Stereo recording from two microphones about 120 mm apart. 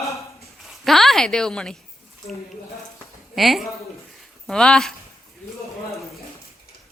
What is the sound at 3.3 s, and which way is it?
A woman's voice, centre (ahead or behind).